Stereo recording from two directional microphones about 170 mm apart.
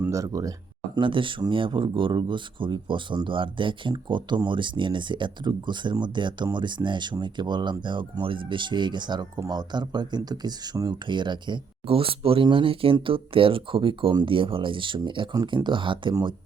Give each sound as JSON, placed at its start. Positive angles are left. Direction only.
{"t": 0.0, "sound": "speech", "side_deg": -20}
{"t": 0.9, "sound": "speech", "side_deg": -30}